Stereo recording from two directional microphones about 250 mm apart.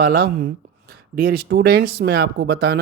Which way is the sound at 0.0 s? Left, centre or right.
Right.